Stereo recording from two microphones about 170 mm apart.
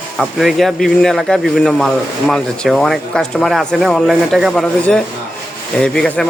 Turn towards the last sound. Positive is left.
turn(degrees=5)  # may be behind; listen again after turning